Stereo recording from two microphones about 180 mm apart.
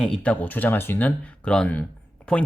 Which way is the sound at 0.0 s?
5° left (ahead or behind).